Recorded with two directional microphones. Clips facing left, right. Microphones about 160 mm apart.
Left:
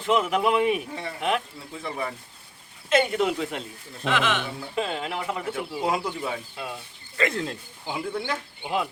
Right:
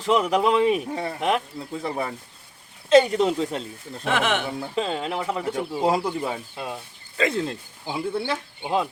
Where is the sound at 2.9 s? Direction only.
35° right (ahead or behind).